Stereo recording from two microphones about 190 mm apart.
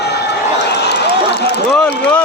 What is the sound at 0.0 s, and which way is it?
Run, 60° left (ahead or behind).